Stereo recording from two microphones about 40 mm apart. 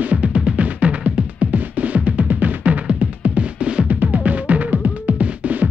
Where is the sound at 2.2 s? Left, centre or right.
Right.